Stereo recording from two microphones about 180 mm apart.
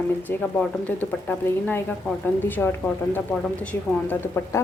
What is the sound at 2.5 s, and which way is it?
A woman's voice, 10° left (ahead or behind).